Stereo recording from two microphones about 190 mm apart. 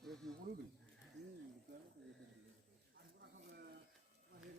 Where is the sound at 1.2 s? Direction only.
40° right (ahead or behind).